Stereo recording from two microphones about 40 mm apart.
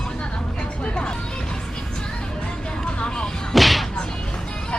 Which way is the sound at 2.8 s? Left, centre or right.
Left.